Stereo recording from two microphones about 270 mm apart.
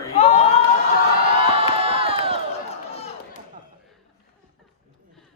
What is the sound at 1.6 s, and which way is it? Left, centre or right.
Crowd, right.